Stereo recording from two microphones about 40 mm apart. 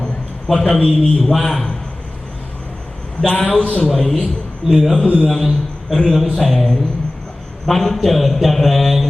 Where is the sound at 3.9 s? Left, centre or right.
Centre.